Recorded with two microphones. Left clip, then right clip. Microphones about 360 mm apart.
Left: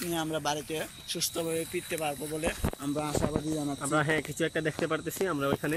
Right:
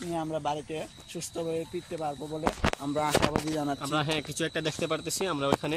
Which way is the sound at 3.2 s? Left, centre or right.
Right.